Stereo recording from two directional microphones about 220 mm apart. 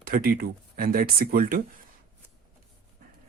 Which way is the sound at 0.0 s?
40° right (ahead or behind).